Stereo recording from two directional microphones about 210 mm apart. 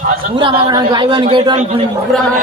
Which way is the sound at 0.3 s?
20° right (ahead or behind).